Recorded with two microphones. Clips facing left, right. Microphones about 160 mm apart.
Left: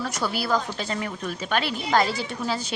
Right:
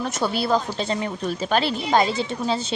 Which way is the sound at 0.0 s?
25° right (ahead or behind).